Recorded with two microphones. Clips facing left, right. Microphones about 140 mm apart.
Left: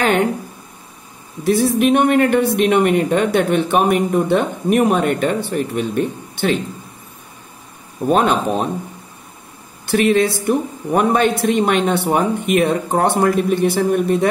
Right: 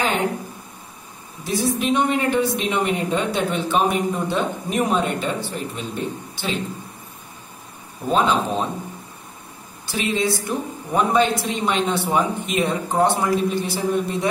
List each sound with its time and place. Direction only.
1.4 s speech: 60° left (ahead or behind)
8.1 s speech: 60° left (ahead or behind)
9.8 s speech: 60° left (ahead or behind)